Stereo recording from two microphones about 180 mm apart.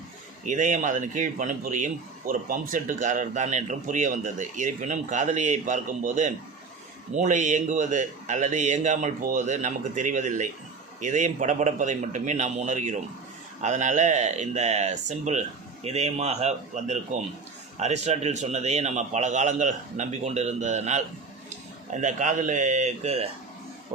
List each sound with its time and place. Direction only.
0.4 s a man's voice: 45° right (ahead or behind)
22.0 s a man's voice: 45° right (ahead or behind)